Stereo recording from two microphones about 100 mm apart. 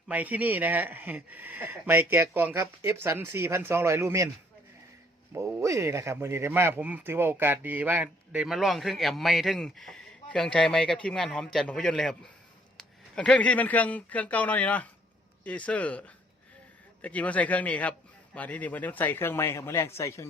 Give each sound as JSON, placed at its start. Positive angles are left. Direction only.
{"t": 0.1, "sound": "speech", "side_deg": -15}
{"t": 5.3, "sound": "speech", "side_deg": -30}
{"t": 8.4, "sound": "a man's voice", "side_deg": 0}